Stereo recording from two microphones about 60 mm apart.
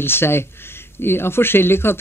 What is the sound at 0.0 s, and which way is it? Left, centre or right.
Speech, left.